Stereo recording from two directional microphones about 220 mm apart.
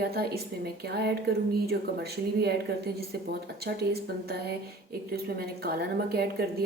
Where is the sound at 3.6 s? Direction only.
45° right (ahead or behind).